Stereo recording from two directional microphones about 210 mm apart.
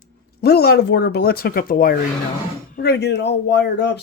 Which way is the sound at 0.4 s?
50° left (ahead or behind).